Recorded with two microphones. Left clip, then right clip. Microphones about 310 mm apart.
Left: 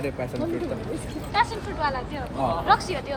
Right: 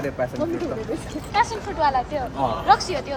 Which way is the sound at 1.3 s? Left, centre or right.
Centre.